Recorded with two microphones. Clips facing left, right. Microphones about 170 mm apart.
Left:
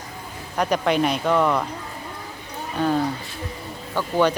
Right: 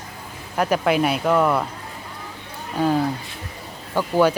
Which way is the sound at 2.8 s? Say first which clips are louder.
Right 2 dB; 10° right (ahead or behind).